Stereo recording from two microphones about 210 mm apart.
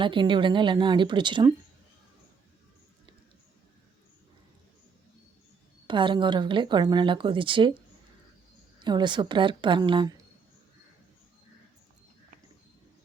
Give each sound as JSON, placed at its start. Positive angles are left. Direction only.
{"t": 0.0, "sound": "speech", "side_deg": -25}
{"t": 5.9, "sound": "speech", "side_deg": -25}
{"t": 8.8, "sound": "speech", "side_deg": -20}